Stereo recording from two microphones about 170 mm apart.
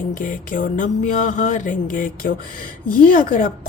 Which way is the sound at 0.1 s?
50° left (ahead or behind).